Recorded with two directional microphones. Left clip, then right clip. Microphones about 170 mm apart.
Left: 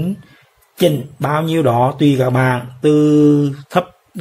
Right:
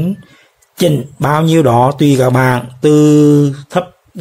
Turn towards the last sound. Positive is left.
turn(degrees=-5)  # may be behind; listen again after turning